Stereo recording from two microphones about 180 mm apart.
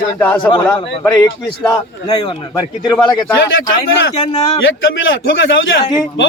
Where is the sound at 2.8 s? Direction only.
20° left (ahead or behind).